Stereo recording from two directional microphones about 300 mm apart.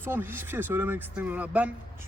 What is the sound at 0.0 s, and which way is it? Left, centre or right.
Speech, centre.